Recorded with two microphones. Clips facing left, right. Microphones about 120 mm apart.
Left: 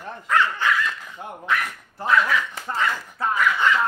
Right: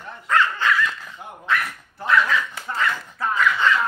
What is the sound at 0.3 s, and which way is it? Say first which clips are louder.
Speech: right 1 dB; 15° left (ahead or behind).